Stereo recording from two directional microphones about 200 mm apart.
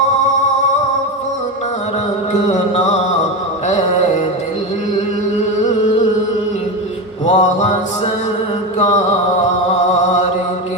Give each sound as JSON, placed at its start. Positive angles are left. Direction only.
{"t": 2.5, "sound": "music", "side_deg": 35}
{"t": 7.3, "sound": "music", "side_deg": 35}